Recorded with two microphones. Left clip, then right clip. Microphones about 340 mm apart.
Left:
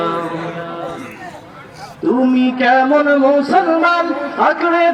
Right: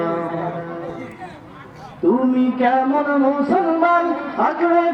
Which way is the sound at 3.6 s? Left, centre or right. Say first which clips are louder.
Left 5 dB; left.